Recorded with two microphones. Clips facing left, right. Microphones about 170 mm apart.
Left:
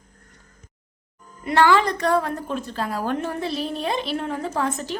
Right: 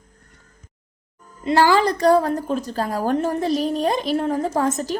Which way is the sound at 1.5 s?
35° right (ahead or behind).